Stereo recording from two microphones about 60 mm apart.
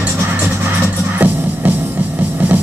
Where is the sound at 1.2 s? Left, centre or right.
Right.